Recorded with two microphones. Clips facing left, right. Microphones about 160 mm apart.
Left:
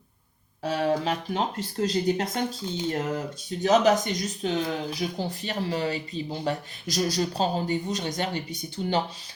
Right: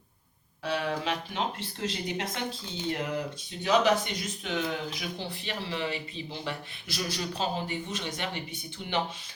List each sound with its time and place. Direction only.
0.6 s speech: 35° left (ahead or behind)